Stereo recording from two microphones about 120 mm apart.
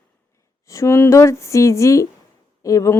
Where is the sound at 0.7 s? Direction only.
25° left (ahead or behind).